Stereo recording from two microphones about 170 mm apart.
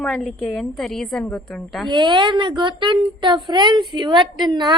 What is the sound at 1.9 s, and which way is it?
A woman's voice, 25° right (ahead or behind).